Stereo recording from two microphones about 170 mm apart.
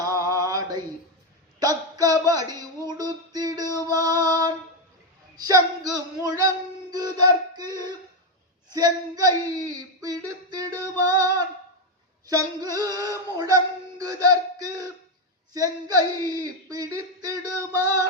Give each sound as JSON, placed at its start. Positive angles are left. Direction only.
{"t": 0.3, "sound": "mantra", "side_deg": -20}
{"t": 1.5, "sound": "a man's voice", "side_deg": -20}
{"t": 3.0, "sound": "music", "side_deg": -20}
{"t": 3.9, "sound": "female singing", "side_deg": -20}
{"t": 5.4, "sound": "speech", "side_deg": -20}
{"t": 6.9, "sound": "music", "side_deg": -20}
{"t": 8.7, "sound": "speech", "side_deg": -20}
{"t": 14.0, "sound": "a sound", "side_deg": -20}
{"t": 15.5, "sound": "speech", "side_deg": -20}